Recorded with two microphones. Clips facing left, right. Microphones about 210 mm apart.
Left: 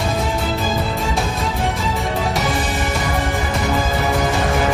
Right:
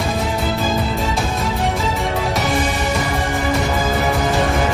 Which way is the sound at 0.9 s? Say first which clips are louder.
Right 1 dB; centre (ahead or behind).